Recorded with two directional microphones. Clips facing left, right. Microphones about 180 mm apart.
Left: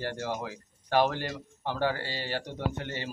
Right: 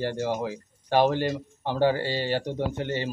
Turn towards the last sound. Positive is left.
turn(degrees=-25)  # may be behind; listen again after turning